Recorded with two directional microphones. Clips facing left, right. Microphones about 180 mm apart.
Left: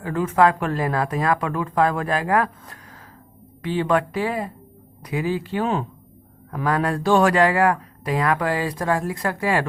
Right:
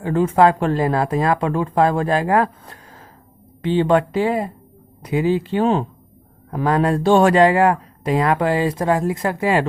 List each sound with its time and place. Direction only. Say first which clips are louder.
0.0 s speech: right 4 dB; 30° right (ahead or behind)